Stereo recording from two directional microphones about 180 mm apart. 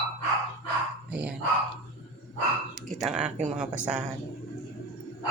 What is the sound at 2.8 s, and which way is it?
Speech, 5° right (ahead or behind).